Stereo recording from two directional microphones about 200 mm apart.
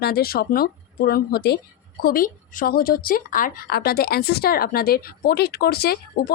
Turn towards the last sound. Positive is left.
turn(degrees=50)  # may be behind; listen again after turning